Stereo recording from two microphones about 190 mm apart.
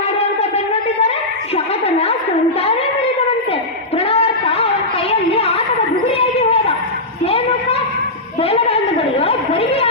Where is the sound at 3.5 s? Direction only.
30° left (ahead or behind).